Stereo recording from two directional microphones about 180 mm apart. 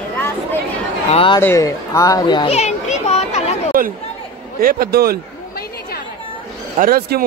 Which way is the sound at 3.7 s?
50° right (ahead or behind).